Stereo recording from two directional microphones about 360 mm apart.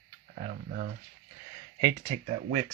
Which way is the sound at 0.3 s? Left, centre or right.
Right.